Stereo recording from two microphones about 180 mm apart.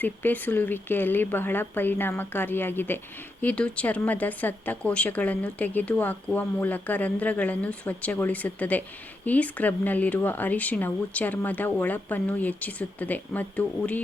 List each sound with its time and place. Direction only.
0.0 s speech: 10° left (ahead or behind)